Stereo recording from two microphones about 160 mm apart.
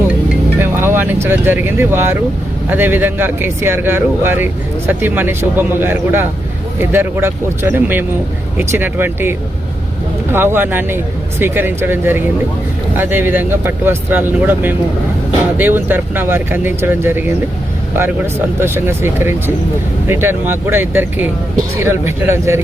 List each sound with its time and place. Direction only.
0.6 s speech: 15° right (ahead or behind)
10.3 s speech: 15° right (ahead or behind)
18.6 s speech: 15° right (ahead or behind)